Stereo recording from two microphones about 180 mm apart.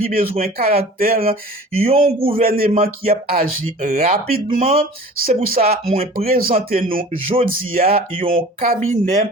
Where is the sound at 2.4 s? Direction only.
55° right (ahead or behind).